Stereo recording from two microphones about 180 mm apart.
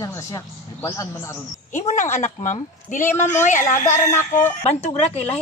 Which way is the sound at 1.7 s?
40° left (ahead or behind).